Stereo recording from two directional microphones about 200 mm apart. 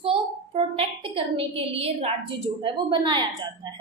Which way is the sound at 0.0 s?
30° right (ahead or behind).